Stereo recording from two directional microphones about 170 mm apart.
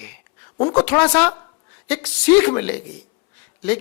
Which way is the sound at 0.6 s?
10° left (ahead or behind).